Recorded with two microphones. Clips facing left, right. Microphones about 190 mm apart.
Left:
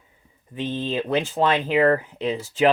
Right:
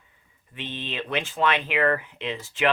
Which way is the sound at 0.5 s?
40° left (ahead or behind).